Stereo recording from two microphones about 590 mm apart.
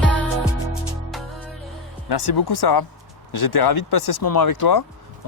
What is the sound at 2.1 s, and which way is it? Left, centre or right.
Speech, left.